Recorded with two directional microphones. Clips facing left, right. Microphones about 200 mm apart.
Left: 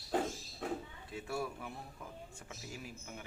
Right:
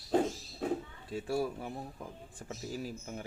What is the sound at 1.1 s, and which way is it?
A man's voice, 35° right (ahead or behind).